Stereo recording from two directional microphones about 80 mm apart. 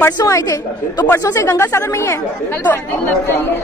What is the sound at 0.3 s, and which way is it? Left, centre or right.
Speech, left.